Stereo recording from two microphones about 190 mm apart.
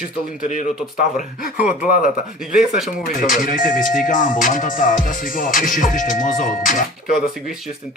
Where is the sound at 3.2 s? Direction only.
45° left (ahead or behind).